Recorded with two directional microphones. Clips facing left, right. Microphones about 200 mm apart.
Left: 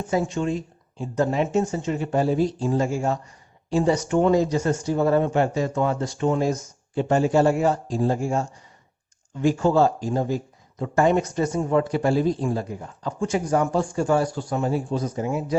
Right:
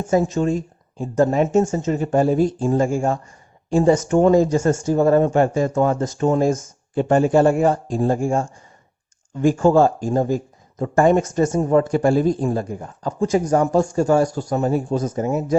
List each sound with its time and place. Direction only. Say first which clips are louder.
0.1 s speech: right 5 dB; 40° right (ahead or behind)